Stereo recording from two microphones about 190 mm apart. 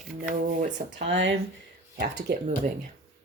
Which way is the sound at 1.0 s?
70° right (ahead or behind).